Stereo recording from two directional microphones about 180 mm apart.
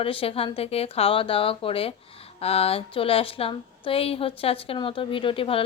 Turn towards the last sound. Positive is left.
turn(degrees=30)  # may be behind; listen again after turning